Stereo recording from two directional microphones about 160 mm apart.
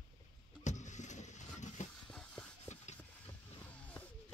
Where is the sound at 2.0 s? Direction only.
5° left (ahead or behind).